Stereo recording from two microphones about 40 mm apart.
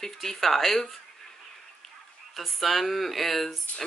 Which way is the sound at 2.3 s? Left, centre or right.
Centre.